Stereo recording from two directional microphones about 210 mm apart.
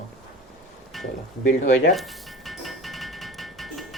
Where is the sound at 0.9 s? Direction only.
Centre (ahead or behind).